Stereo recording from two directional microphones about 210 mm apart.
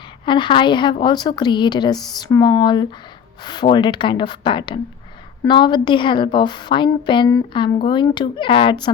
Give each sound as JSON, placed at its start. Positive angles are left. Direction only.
{"t": 0.3, "sound": "a woman's voice", "side_deg": 20}